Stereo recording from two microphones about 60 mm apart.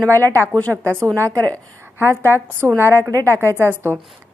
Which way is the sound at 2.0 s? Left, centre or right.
Right.